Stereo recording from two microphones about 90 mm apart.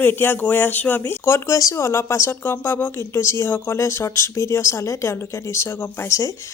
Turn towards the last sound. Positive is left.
turn(degrees=35)  # may be behind; listen again after turning